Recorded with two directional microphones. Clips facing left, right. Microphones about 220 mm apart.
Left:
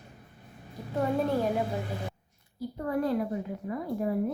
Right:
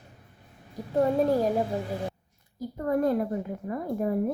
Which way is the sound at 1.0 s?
40° right (ahead or behind).